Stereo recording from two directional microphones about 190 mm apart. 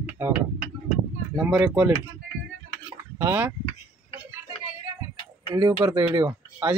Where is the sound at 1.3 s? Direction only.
5° right (ahead or behind).